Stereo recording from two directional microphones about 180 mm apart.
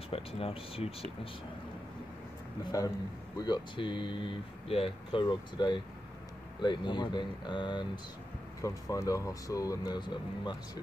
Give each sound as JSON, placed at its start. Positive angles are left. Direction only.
{"t": 0.1, "sound": "speech", "side_deg": 30}
{"t": 3.3, "sound": "speech", "side_deg": 25}